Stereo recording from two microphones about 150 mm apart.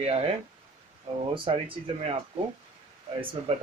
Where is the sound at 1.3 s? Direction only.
35° right (ahead or behind).